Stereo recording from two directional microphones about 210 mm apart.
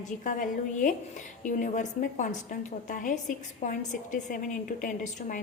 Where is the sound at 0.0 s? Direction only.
40° left (ahead or behind).